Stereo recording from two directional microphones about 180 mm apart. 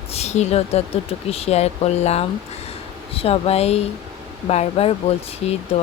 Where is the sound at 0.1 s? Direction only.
35° left (ahead or behind).